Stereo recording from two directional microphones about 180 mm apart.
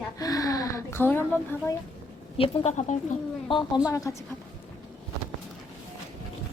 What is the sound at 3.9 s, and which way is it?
Speech, 15° left (ahead or behind).